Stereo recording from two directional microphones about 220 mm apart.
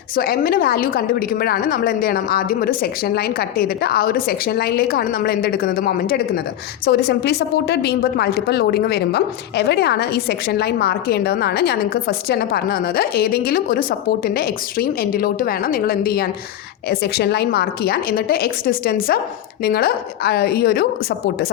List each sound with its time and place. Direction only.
0.2 s a woman's voice: 40° left (ahead or behind)